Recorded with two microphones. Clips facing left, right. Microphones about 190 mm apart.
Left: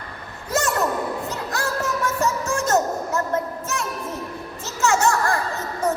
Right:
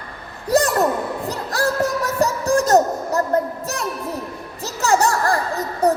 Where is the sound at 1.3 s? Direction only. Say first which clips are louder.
Right 4 dB; 35° right (ahead or behind).